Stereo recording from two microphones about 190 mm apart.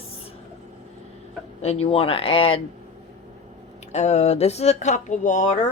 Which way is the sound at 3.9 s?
35° left (ahead or behind).